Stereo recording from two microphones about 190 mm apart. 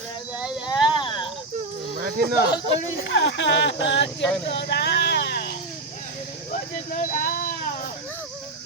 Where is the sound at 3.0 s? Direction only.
65° left (ahead or behind).